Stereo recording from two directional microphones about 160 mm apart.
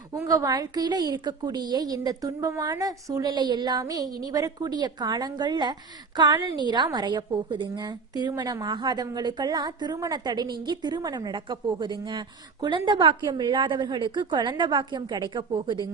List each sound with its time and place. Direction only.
0.1 s a woman's voice: 20° right (ahead or behind)